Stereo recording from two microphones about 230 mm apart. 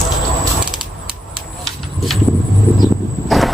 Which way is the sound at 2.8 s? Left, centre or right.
Centre.